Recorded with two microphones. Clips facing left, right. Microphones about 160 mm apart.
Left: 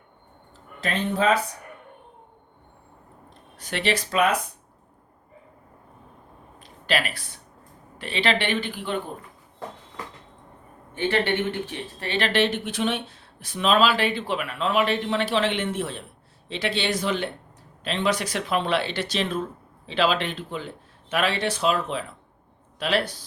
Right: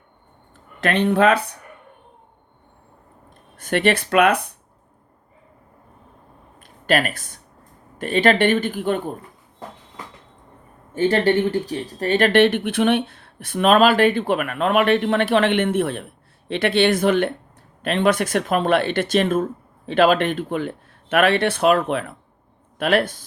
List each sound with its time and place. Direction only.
0.5 s speech: 70° right (ahead or behind)
3.2 s speech: 55° right (ahead or behind)
6.6 s a sound: 50° right (ahead or behind)
7.9 s speech: 50° right (ahead or behind)
10.9 s speech: 40° right (ahead or behind)